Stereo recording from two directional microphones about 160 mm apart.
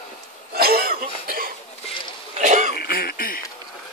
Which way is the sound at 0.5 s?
75° right (ahead or behind).